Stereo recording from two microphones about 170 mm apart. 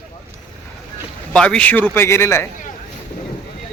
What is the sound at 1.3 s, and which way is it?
Speech, 5° left (ahead or behind).